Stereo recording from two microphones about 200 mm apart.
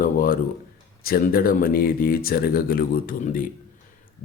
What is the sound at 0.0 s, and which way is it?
A man's voice, 45° left (ahead or behind).